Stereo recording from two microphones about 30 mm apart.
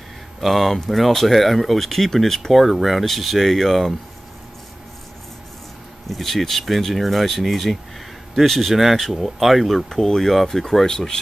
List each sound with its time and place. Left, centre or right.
0.4 s speech: centre
6.0 s speech: centre
9.9 s speech: centre
10.9 s speech: left